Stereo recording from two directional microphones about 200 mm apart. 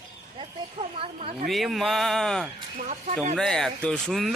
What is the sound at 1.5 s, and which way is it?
Speech, centre (ahead or behind).